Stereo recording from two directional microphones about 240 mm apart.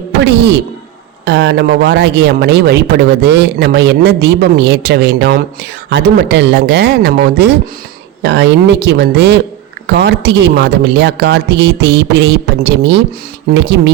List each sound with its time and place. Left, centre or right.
0.2 s speech: right